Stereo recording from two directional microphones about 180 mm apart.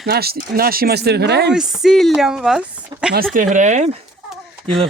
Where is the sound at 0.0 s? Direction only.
60° right (ahead or behind).